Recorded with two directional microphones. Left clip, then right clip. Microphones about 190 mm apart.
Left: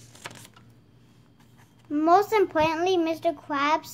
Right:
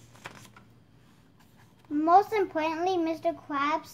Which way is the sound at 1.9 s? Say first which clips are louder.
Left 2 dB; 35° left (ahead or behind).